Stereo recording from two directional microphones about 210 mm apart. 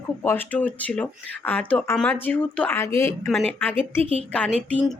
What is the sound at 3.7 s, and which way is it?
Speech, 30° right (ahead or behind).